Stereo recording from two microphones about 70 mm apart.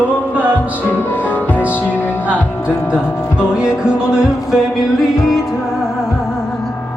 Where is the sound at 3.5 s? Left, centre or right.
Centre.